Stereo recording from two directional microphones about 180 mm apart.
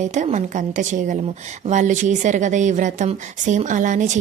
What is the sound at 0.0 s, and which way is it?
Speech, 40° right (ahead or behind).